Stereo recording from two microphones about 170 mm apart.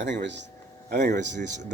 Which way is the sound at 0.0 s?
90° right.